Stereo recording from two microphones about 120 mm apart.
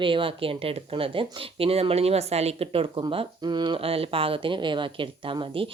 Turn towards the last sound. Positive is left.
turn(degrees=-45)  # may be behind; listen again after turning